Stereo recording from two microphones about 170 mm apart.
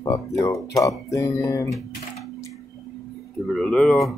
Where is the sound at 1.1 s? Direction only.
20° left (ahead or behind).